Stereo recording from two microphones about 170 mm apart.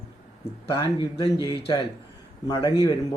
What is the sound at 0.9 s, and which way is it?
Speech, 30° left (ahead or behind).